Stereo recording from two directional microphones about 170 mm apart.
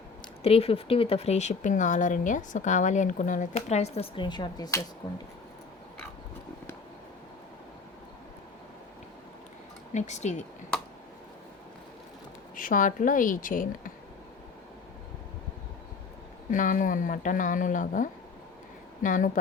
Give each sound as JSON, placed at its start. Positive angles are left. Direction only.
{"t": 0.4, "sound": "speech", "side_deg": 35}
{"t": 9.9, "sound": "speech", "side_deg": 45}
{"t": 12.5, "sound": "speech", "side_deg": 50}
{"t": 16.5, "sound": "speech", "side_deg": 50}